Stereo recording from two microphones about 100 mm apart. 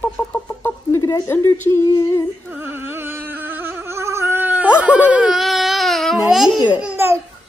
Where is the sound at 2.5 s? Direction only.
20° right (ahead or behind); by 6.6 s 5° right (ahead or behind).